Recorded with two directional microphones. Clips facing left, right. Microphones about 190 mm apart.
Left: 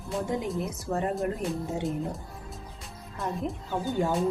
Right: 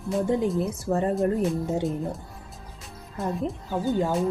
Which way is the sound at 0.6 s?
35° right (ahead or behind).